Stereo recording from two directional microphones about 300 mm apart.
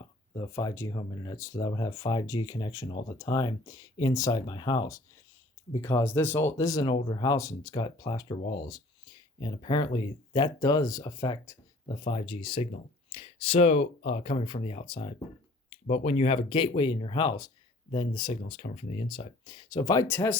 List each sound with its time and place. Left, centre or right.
0.3 s speech: centre